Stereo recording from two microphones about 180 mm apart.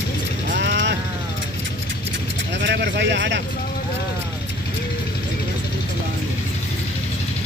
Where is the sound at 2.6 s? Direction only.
75° right (ahead or behind).